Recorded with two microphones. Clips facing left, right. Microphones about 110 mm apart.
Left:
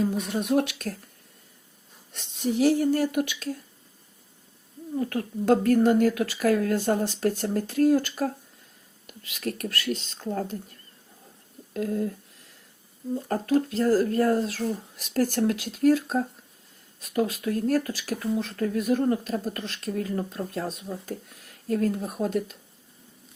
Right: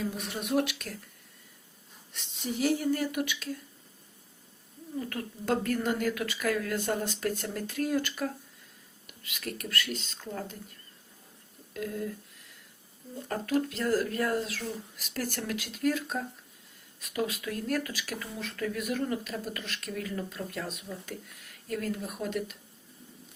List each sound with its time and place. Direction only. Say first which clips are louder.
0.0 s speech: left 8 dB; 50° left (ahead or behind)
0.3 s speech: left 4 dB; 40° left (ahead or behind)
2.6 s speech: left 6 dB; 40° left (ahead or behind)
4.9 s speech: left 8 dB; 45° left (ahead or behind)
11.7 s a sound: left 7 dB; 40° left (ahead or behind)
13.2 s speech: left 4 dB; 35° left (ahead or behind)